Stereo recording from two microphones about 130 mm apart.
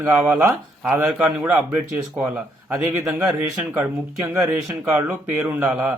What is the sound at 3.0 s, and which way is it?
Speech, centre (ahead or behind).